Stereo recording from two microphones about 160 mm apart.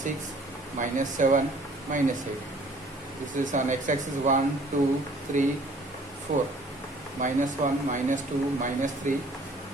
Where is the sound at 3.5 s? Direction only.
50° right (ahead or behind).